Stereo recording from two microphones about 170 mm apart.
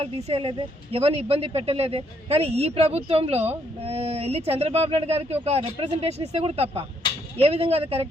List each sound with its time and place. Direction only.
0.0 s speech: 35° right (ahead or behind)